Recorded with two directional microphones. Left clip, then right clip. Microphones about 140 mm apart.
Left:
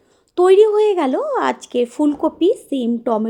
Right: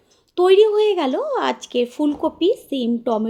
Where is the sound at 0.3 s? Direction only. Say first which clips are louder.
Left 2 dB; 35° left (ahead or behind).